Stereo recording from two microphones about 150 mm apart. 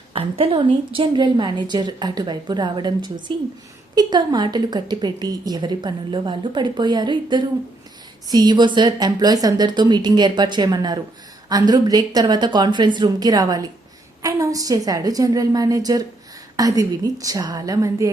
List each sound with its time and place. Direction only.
0.1 s a woman's voice: 35° right (ahead or behind)